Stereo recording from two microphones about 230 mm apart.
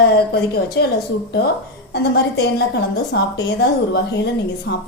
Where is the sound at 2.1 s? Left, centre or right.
Left.